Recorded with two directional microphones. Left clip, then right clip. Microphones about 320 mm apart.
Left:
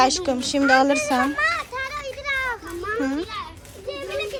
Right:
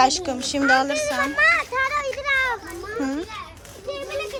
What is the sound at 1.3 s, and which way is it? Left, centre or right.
Children playing, right.